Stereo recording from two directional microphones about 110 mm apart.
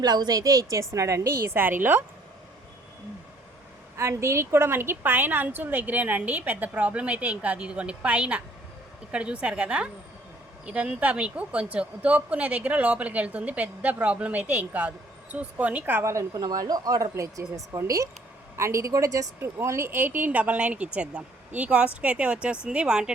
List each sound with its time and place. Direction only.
0.0 s a woman's voice: 40° right (ahead or behind); by 2.0 s 20° right (ahead or behind)
3.9 s speech: 25° right (ahead or behind); by 23.1 s 10° right (ahead or behind)